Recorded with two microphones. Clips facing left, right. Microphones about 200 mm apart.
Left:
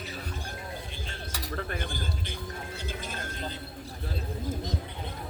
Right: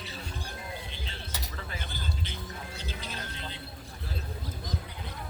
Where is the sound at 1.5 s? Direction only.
55° left (ahead or behind).